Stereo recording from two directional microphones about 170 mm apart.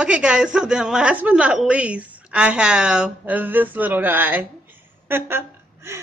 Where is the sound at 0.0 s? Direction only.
5° right (ahead or behind).